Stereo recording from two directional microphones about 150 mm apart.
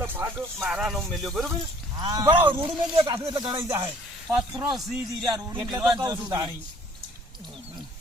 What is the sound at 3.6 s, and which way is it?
Speech, 20° right (ahead or behind).